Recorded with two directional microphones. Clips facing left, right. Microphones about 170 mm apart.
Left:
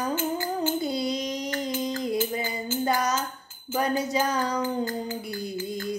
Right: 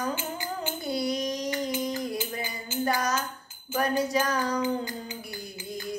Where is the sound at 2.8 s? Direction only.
20° left (ahead or behind).